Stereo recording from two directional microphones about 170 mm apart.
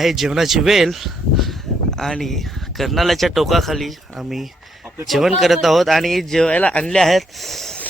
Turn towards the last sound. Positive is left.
turn(degrees=5)  # may be behind; listen again after turning